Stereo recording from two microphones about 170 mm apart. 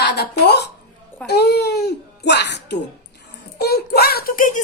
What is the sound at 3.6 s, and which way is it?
A woman's voice, 70° left (ahead or behind).